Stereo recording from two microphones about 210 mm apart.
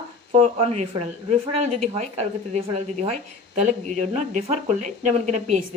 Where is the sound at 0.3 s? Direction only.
30° right (ahead or behind).